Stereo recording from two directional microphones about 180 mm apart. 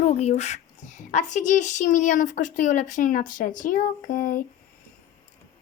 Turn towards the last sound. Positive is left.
turn(degrees=50)  # may be behind; listen again after turning